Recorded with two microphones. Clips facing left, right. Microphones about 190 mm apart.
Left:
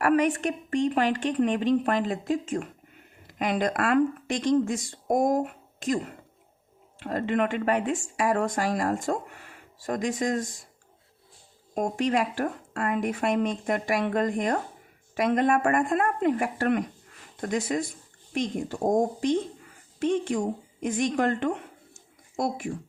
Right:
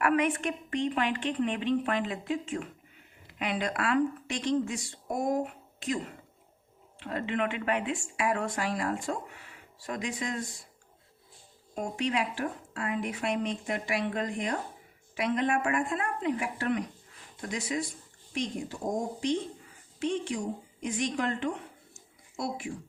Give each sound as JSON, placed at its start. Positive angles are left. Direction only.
{"t": 0.0, "sound": "a woman's voice", "side_deg": 40}
{"t": 11.7, "sound": "a woman's voice", "side_deg": 50}